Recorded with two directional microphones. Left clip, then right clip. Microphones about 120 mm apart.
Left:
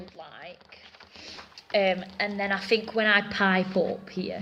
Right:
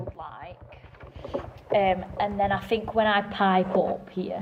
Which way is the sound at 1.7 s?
35° left (ahead or behind).